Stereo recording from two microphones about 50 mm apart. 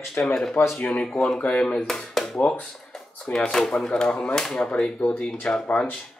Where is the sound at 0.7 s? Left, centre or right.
Left.